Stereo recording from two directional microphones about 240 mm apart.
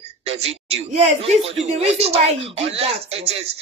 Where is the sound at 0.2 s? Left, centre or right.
Right.